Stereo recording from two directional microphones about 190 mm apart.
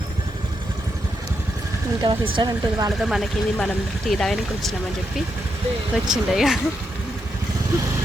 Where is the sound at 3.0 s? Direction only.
Centre (ahead or behind).